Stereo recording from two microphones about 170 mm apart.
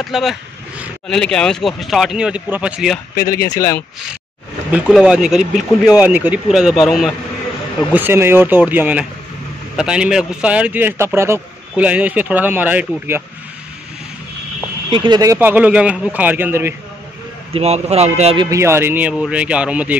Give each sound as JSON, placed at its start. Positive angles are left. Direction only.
{"t": 0.0, "sound": "speech", "side_deg": 0}
{"t": 3.2, "sound": "speech", "side_deg": 65}
{"t": 3.4, "sound": "speech", "side_deg": 20}
{"t": 4.7, "sound": "speech", "side_deg": -5}
{"t": 7.9, "sound": "a man's voice", "side_deg": -10}
{"t": 14.9, "sound": "a man's voice", "side_deg": -25}
{"t": 17.6, "sound": "speech", "side_deg": -40}
{"t": 18.5, "sound": "a man's voice", "side_deg": -15}